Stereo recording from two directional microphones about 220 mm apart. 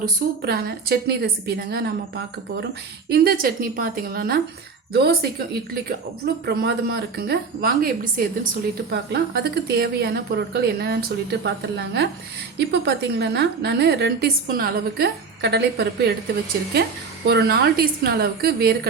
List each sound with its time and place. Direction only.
0.0 s a woman's voice: 45° right (ahead or behind)
12.5 s a woman's voice: 50° right (ahead or behind)
17.2 s a woman's voice: 45° right (ahead or behind)